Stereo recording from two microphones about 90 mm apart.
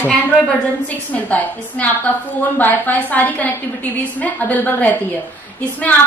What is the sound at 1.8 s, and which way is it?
A woman's voice, 15° left (ahead or behind).